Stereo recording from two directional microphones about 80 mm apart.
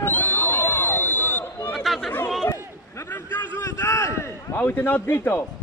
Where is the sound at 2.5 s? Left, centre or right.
Left.